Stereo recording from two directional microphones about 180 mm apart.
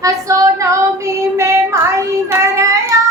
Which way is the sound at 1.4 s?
15° right (ahead or behind).